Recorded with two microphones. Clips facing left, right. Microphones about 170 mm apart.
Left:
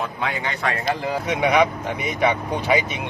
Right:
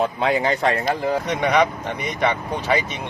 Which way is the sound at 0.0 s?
30° right (ahead or behind).